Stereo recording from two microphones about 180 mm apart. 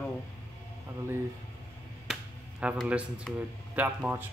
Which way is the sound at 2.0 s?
5° right (ahead or behind).